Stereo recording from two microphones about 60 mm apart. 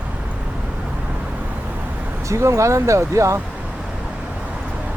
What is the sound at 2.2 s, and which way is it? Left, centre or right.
Speech, right.